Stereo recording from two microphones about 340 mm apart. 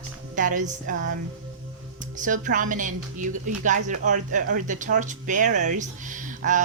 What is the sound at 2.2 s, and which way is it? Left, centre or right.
A woman's voice, right.